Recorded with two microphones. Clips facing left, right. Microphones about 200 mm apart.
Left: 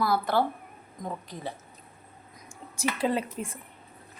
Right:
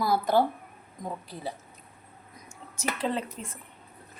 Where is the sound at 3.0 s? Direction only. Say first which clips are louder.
Left 3 dB; 10° left (ahead or behind).